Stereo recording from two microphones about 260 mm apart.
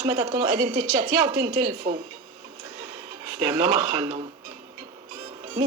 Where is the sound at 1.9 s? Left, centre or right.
Right.